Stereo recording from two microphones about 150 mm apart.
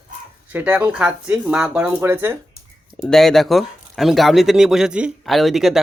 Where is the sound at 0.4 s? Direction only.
10° right (ahead or behind).